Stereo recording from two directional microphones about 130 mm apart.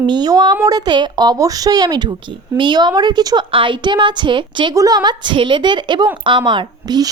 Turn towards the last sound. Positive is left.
turn(degrees=-30)  # may be behind; listen again after turning